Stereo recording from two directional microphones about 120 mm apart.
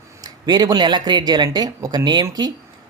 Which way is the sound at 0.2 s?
35° right (ahead or behind).